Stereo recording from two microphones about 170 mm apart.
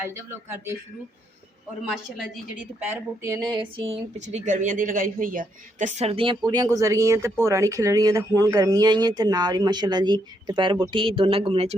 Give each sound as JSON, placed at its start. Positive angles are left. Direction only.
{"t": 0.0, "sound": "speech", "side_deg": -15}
{"t": 2.3, "sound": "speech", "side_deg": -10}